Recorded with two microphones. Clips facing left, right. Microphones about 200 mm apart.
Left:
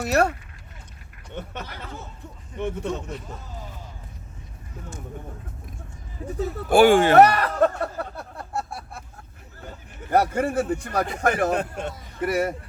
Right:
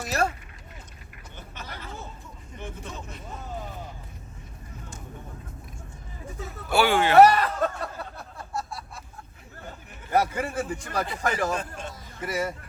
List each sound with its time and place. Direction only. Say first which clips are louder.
0.0 s a man's voice: left 6 dB; 65° left (ahead or behind)
6.7 s speech: left 7 dB; 50° left (ahead or behind)
10.1 s a man's voice: left 4 dB; 55° left (ahead or behind)